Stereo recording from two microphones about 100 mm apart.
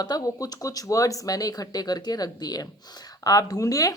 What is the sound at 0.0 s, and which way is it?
Speech, 40° left (ahead or behind).